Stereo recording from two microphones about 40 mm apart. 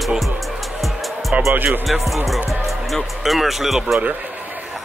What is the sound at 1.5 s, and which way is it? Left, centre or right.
Speech, right.